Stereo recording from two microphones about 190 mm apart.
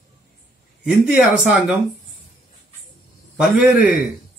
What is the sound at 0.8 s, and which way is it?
Speech, 5° right (ahead or behind).